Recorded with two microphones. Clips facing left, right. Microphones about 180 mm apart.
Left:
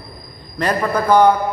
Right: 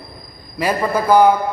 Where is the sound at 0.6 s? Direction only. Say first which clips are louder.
Even; 10° right (ahead or behind).